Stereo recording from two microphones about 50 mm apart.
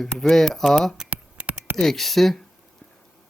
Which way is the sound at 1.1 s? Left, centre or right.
Right.